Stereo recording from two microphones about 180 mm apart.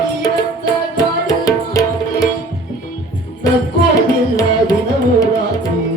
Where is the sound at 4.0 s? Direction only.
20° left (ahead or behind).